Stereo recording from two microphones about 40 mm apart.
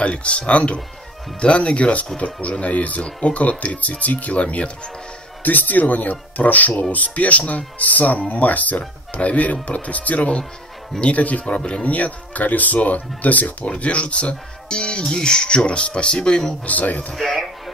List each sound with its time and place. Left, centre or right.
0.0 s speech: left
5.4 s speech: left
16.6 s speech: left
17.1 s speech: centre